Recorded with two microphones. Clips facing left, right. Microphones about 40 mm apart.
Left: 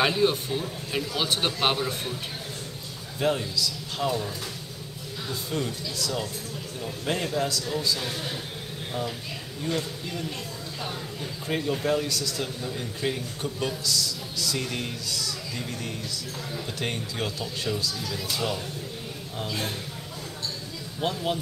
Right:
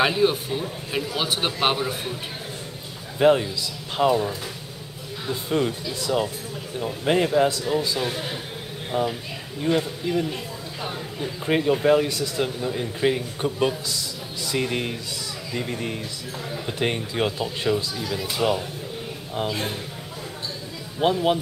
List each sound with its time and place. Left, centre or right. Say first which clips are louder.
0.0 s speech: right 3 dB; centre
3.2 s a man's voice: right 8 dB; right
5.3 s a man's voice: right 7 dB; right
11.4 s a man's voice: right 7 dB; right
21.0 s a man's voice: right 7 dB; right